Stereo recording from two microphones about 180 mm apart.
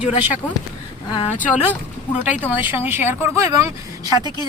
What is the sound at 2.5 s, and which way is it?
Speech, 10° right (ahead or behind).